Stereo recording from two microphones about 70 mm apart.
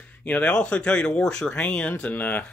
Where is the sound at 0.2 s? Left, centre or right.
Centre.